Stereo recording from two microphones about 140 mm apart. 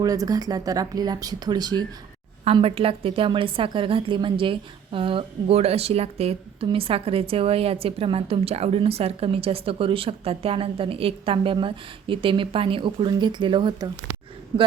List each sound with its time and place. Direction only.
0.0 s speech: 25° right (ahead or behind)
2.4 s a woman's voice: 45° right (ahead or behind)